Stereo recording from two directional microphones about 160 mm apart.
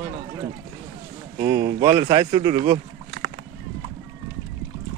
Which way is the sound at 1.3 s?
25° right (ahead or behind).